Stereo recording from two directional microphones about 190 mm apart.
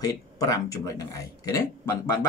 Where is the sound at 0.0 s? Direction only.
15° left (ahead or behind).